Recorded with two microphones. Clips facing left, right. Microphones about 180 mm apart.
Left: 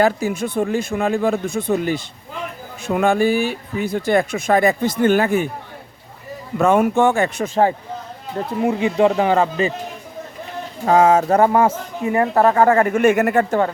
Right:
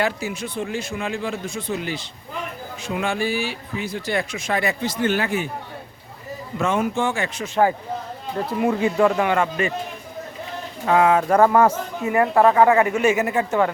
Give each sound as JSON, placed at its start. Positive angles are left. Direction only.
{"t": 0.0, "sound": "speech", "side_deg": 50}
{"t": 6.6, "sound": "speech", "side_deg": 60}
{"t": 7.4, "sound": "speech", "side_deg": 50}
{"t": 8.6, "sound": "speech", "side_deg": 25}
{"t": 10.8, "sound": "speech", "side_deg": 40}
{"t": 11.3, "sound": "speech", "side_deg": 25}